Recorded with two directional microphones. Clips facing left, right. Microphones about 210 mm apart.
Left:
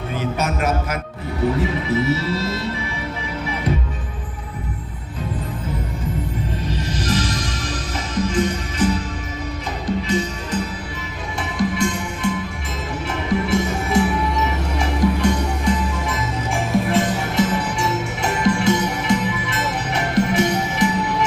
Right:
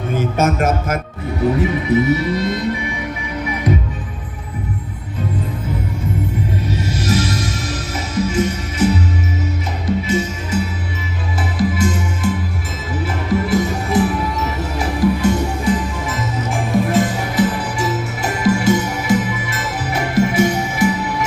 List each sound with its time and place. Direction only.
0.1 s a man's voice: 45° right (ahead or behind)
1.5 s music: 20° right (ahead or behind)
6.7 s music: 10° right (ahead or behind)
16.9 s music: 5° right (ahead or behind)